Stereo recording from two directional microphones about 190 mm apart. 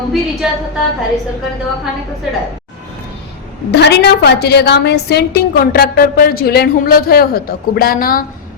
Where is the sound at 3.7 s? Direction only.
65° left (ahead or behind).